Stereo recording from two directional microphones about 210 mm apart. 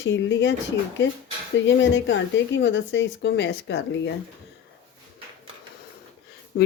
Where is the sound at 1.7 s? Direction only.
60° left (ahead or behind).